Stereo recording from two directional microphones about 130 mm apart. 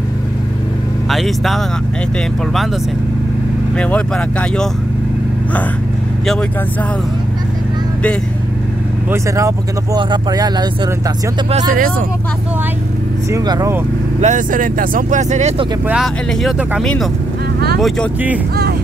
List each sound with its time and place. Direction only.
1.1 s speech: centre (ahead or behind)
3.7 s speech: 10° left (ahead or behind)
9.9 s speech: 30° right (ahead or behind)
11.5 s speech: 90° right
13.3 s speech: 25° right (ahead or behind)
14.2 s speech: 80° right; by 15.5 s 65° right (ahead or behind)
15.9 s speech: 5° right (ahead or behind)